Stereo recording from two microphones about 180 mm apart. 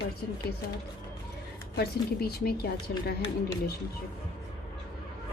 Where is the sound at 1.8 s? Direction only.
60° left (ahead or behind).